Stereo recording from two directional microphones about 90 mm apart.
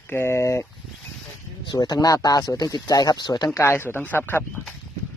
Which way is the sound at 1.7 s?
45° left (ahead or behind).